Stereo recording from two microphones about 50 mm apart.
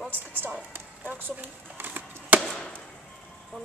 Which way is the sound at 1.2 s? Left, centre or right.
Right.